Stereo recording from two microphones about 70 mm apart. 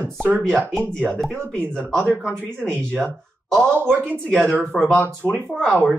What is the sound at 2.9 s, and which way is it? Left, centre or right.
Speech, centre.